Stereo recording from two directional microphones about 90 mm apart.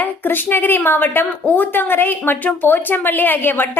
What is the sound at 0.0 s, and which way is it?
A woman's voice, 20° left (ahead or behind).